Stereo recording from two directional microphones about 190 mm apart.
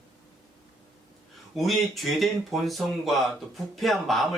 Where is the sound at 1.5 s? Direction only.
Centre (ahead or behind).